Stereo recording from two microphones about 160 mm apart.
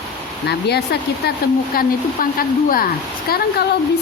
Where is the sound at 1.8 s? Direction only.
65° left (ahead or behind).